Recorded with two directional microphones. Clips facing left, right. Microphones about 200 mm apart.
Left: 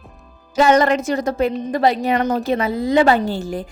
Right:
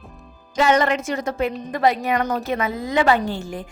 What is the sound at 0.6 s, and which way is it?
A woman's voice, 40° left (ahead or behind).